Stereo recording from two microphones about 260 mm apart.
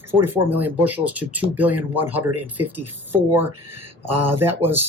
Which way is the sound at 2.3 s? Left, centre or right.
Right.